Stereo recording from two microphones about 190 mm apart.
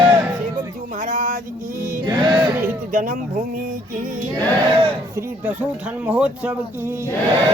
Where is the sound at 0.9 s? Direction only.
45° right (ahead or behind).